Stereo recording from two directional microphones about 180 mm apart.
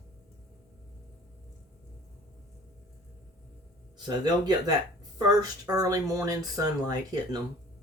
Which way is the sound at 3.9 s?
25° right (ahead or behind).